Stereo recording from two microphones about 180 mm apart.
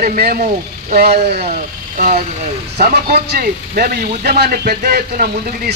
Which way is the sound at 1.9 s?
45° right (ahead or behind).